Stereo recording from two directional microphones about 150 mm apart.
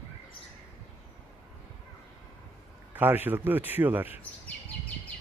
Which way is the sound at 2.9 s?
15° right (ahead or behind).